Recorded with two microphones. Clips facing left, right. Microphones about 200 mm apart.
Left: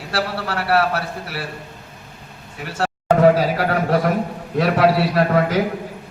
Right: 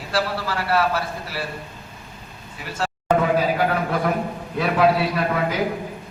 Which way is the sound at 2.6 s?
65° left (ahead or behind).